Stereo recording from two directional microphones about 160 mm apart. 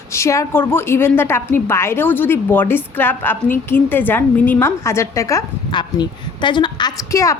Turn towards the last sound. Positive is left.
turn(degrees=20)  # may be behind; listen again after turning